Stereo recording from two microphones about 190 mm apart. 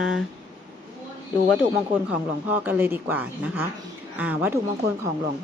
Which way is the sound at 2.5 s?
10° right (ahead or behind).